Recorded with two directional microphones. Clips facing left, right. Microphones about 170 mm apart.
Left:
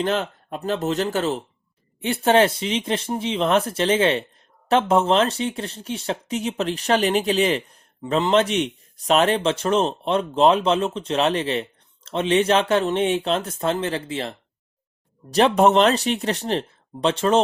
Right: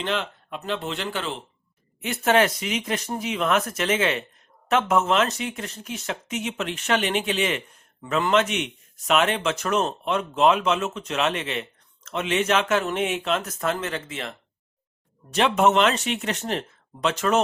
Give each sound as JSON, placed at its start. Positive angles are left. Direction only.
{"t": 0.0, "sound": "speech", "side_deg": 40}
{"t": 2.0, "sound": "speech", "side_deg": 30}